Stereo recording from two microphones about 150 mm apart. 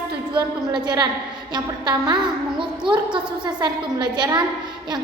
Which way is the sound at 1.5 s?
30° right (ahead or behind).